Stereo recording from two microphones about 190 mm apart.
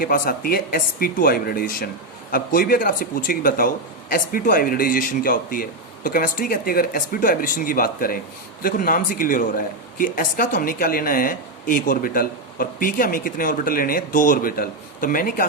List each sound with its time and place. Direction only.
0.0 s a man's voice: 50° left (ahead or behind)